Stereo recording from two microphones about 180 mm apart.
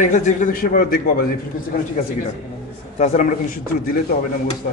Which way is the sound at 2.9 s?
40° left (ahead or behind).